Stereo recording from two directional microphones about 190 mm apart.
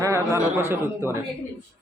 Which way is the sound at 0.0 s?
15° right (ahead or behind).